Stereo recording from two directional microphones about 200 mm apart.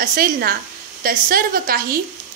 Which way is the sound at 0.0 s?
45° right (ahead or behind).